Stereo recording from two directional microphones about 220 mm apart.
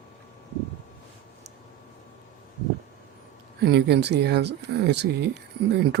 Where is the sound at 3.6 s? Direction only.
50° right (ahead or behind).